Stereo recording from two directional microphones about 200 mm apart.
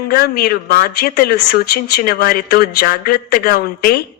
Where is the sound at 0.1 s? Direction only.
50° left (ahead or behind).